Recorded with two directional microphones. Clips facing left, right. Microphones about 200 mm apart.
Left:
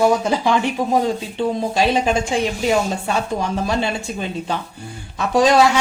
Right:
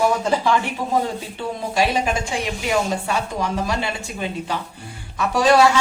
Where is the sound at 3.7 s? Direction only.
25° left (ahead or behind).